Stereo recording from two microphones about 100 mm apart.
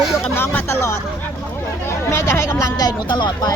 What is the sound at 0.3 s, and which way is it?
Speech, 25° left (ahead or behind).